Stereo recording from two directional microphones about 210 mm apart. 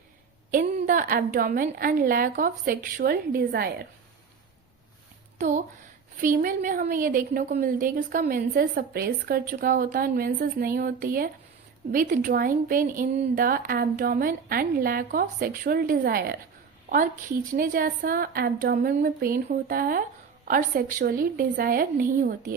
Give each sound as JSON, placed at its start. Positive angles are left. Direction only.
{"t": 0.5, "sound": "a woman's voice", "side_deg": -40}
{"t": 5.4, "sound": "a woman's voice", "side_deg": -35}